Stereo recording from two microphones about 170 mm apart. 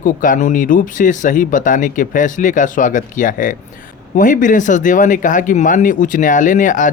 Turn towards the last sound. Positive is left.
turn(degrees=50)  # may be behind; listen again after turning